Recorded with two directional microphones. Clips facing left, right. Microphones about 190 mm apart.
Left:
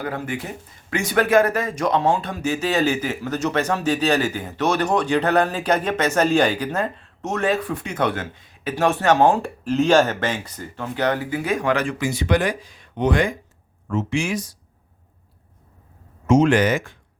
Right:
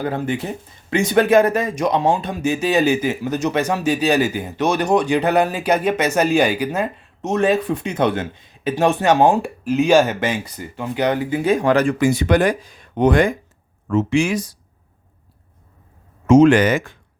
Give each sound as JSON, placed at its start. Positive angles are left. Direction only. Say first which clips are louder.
{"t": 0.0, "sound": "speech", "louder": "right 5 dB", "side_deg": -25}
{"t": 13.9, "sound": "speech", "louder": "right 6 dB", "side_deg": -90}
{"t": 16.2, "sound": "speech", "louder": "right 5 dB", "side_deg": -90}